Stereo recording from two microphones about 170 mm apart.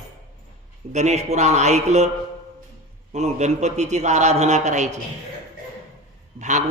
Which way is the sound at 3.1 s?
40° right (ahead or behind).